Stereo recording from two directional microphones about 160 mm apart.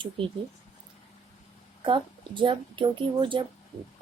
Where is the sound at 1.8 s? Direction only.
30° right (ahead or behind).